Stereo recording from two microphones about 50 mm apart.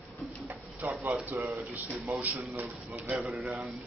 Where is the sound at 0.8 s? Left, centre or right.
Right.